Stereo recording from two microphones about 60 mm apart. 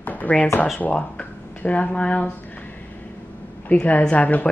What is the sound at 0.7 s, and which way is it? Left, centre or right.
Speech, left.